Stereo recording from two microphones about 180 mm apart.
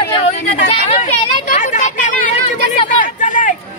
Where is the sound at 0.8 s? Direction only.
35° left (ahead or behind).